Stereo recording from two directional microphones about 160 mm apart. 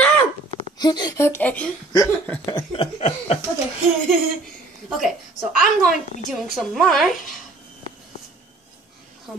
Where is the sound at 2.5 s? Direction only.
30° left (ahead or behind).